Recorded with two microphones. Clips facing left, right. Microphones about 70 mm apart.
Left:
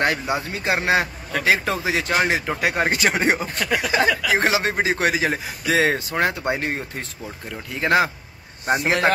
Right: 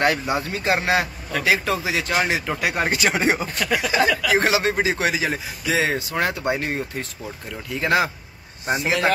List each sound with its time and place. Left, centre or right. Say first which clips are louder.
0.0 s speech: right 1 dB; centre
1.4 s a man's voice: left 1 dB; left
4.1 s speech: even; centre
4.4 s a man's voice: right 1 dB; left
8.6 s a man's voice: left 2 dB; left